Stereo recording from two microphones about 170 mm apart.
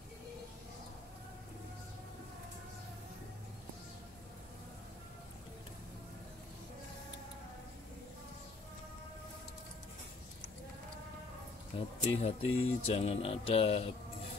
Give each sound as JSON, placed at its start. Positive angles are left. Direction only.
{"t": 12.0, "sound": "speech", "side_deg": 40}